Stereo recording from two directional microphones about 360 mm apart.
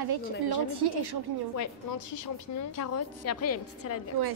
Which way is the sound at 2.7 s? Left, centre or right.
Left.